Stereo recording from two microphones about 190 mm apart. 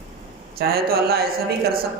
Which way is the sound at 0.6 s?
55° right (ahead or behind).